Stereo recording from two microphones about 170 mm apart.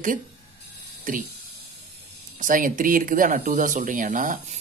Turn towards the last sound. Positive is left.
turn(degrees=-50)  # may be behind; listen again after turning